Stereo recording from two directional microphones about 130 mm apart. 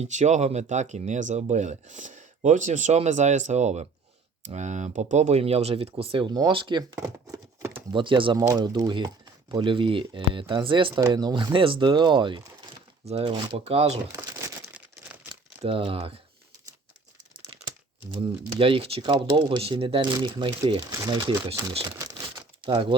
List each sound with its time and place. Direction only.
0.0 s speech: 65° right (ahead or behind); by 6.8 s 35° right (ahead or behind)
6.9 s a sound: 25° right (ahead or behind)
7.9 s speech: 40° right (ahead or behind)
13.7 s speech: 55° right (ahead or behind)
14.1 s crumpling: 25° right (ahead or behind)
15.6 s speech: 45° right (ahead or behind)
18.6 s speech: 45° right (ahead or behind)
21.8 s crumpling: 25° right (ahead or behind)
22.6 s speech: 40° right (ahead or behind)